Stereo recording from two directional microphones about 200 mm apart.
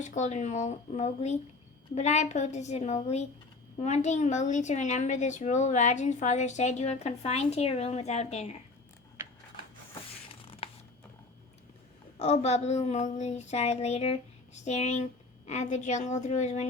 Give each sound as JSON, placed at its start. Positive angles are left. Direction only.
{"t": 0.0, "sound": "a woman's voice", "side_deg": 35}
{"t": 10.6, "sound": "a sound", "side_deg": 30}
{"t": 12.2, "sound": "a woman's voice", "side_deg": 35}